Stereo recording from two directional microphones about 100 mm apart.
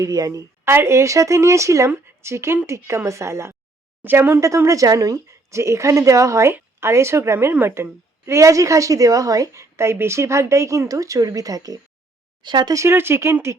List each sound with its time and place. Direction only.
0.0 s a woman's voice: 35° right (ahead or behind); by 4.4 s 20° right (ahead or behind)
4.4 s a woman's voice: 30° right (ahead or behind)
12.4 s speech: 50° right (ahead or behind)
12.7 s a woman's voice: 25° right (ahead or behind)